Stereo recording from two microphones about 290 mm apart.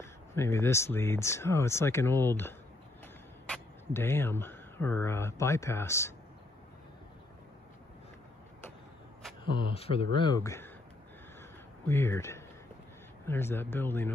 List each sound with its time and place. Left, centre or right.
0.0 s speech: centre
9.6 s speech: centre
11.9 s speech: centre